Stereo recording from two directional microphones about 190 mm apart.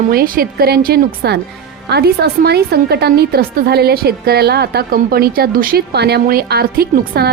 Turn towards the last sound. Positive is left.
turn(degrees=-55)  # may be behind; listen again after turning